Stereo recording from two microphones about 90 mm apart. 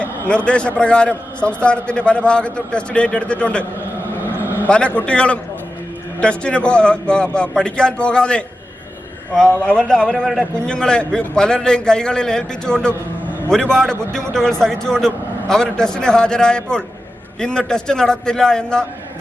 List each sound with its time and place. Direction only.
0.3 s a man's voice: 10° left (ahead or behind)
4.4 s vehicle: 25° right (ahead or behind)
5.0 s a man's voice: 10° left (ahead or behind)
9.6 s a man's voice: 10° left (ahead or behind)